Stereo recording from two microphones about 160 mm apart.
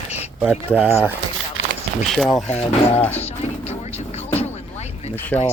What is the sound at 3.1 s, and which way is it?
Music, 40° left (ahead or behind).